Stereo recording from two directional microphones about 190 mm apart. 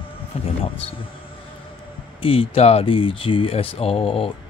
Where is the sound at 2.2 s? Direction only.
30° left (ahead or behind).